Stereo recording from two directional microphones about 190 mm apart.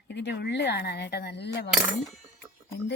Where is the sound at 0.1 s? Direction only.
65° left (ahead or behind).